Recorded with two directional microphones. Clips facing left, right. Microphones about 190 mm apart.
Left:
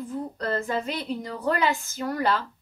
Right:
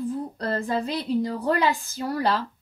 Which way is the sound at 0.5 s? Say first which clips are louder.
Right 2 dB; 35° right (ahead or behind).